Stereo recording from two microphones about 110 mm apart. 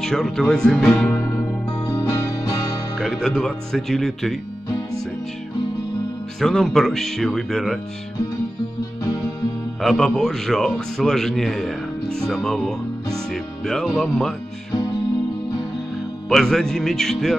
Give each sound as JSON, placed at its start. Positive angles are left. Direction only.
{"t": 0.0, "sound": "a man's voice", "side_deg": 5}
{"t": 0.8, "sound": "music", "side_deg": 15}
{"t": 3.0, "sound": "a man's voice", "side_deg": 0}
{"t": 6.4, "sound": "a man's voice", "side_deg": 5}
{"t": 9.8, "sound": "a man's voice", "side_deg": 0}
{"t": 16.3, "sound": "a man's voice", "side_deg": 5}